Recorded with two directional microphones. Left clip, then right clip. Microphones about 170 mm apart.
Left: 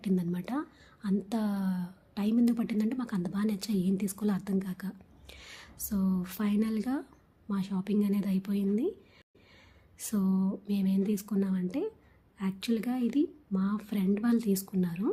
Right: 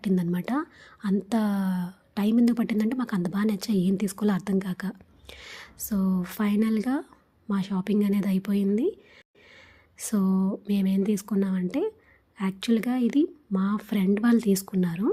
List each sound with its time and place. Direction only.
0.0 s speech: 30° right (ahead or behind)